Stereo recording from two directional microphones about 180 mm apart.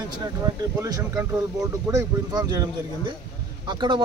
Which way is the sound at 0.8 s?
20° right (ahead or behind).